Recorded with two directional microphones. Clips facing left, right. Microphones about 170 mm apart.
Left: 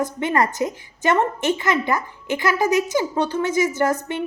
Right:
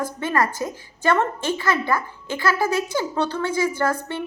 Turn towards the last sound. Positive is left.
turn(degrees=15)  # may be behind; listen again after turning